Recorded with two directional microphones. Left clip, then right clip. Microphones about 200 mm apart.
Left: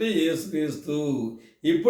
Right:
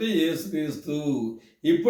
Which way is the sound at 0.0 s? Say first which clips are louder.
Left 1 dB; 10° left (ahead or behind).